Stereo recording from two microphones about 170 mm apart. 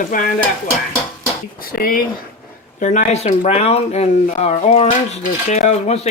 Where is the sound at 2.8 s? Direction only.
45° left (ahead or behind).